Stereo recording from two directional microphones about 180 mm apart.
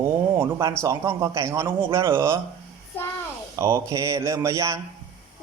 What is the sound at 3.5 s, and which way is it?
A man's voice, 15° right (ahead or behind).